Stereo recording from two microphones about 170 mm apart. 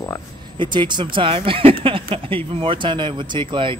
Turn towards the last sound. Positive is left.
turn(degrees=-30)  # may be behind; listen again after turning